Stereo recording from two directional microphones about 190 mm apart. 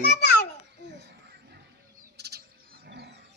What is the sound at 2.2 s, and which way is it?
Bird, 55° right (ahead or behind).